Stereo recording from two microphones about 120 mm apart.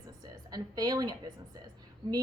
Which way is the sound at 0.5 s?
35° right (ahead or behind).